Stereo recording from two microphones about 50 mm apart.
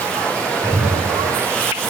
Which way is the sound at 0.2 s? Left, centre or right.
Left.